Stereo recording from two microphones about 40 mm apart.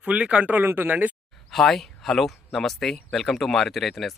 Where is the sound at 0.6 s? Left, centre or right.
Right.